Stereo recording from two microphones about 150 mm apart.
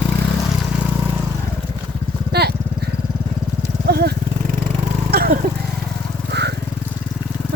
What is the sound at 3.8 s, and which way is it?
Vehicle, 90° right.